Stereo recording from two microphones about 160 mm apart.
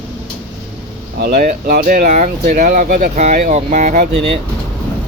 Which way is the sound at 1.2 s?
80° right.